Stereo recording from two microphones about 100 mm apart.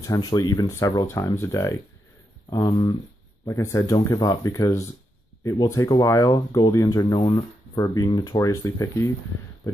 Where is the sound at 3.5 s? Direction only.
30° left (ahead or behind).